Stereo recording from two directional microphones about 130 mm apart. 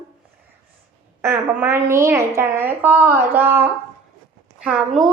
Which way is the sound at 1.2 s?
20° right (ahead or behind).